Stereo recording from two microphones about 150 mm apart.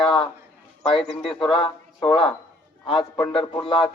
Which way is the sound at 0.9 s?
40° left (ahead or behind).